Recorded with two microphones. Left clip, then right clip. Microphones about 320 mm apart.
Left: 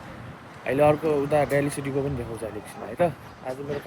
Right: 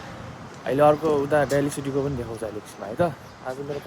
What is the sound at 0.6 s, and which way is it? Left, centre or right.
Speech, centre.